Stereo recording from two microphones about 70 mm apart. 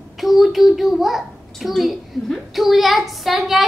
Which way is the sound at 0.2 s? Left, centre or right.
Centre.